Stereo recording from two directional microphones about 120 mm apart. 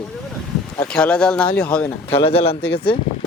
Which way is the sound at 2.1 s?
55° left (ahead or behind).